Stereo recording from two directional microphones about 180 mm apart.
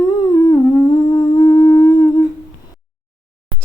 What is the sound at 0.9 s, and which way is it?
Humming, 25° left (ahead or behind).